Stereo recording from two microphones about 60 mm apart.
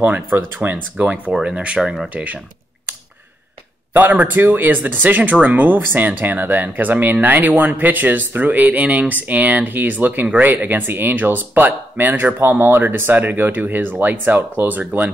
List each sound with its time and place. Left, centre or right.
0.0 s speech: right
0.9 s speech: right
3.9 s speech: right